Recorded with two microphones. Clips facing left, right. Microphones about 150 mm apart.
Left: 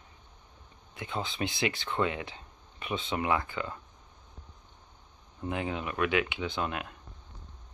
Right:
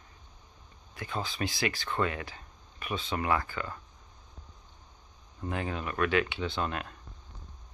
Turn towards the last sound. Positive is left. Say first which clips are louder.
# even
turn(degrees=10)  # may be behind; listen again after turning